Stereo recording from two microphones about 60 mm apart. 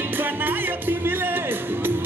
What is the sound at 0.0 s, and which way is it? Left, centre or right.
Music, right.